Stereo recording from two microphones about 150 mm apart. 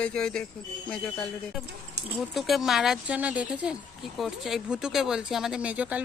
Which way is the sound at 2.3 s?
Centre (ahead or behind).